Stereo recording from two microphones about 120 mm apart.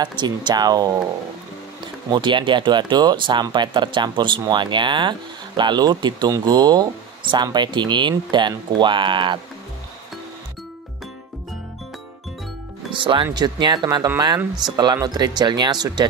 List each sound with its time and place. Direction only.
0.0 s speech: 40° right (ahead or behind)
2.0 s speech: 40° right (ahead or behind)
12.9 s speech: 45° right (ahead or behind)